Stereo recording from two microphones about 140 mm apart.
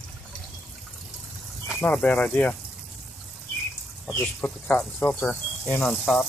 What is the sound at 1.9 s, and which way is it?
Speech, 10° left (ahead or behind).